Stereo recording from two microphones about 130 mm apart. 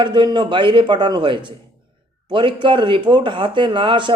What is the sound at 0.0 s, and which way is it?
Speech, 35° right (ahead or behind).